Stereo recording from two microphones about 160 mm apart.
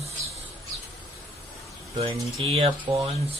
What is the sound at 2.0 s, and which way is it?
Speech, 40° right (ahead or behind).